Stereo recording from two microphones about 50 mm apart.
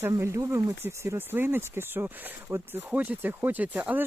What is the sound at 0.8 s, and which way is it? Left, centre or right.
Speech, right.